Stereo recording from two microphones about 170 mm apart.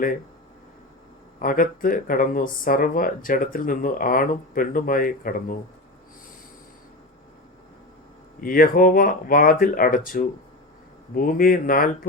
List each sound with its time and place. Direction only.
1.4 s speech: 55° left (ahead or behind)
8.4 s speech: 55° left (ahead or behind)